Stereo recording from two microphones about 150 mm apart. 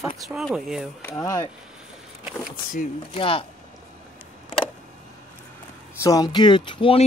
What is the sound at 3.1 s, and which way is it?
Speech, 35° left (ahead or behind).